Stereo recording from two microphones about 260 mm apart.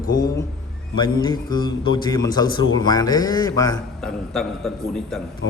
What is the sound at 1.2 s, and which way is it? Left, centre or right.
A man's voice, centre.